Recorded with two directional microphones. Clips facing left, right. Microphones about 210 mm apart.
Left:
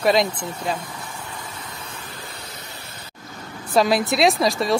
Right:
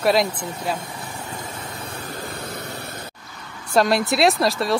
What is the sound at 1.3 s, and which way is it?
Vehicle, 50° right (ahead or behind).